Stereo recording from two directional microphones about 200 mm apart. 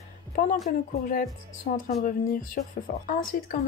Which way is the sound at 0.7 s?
45° left (ahead or behind).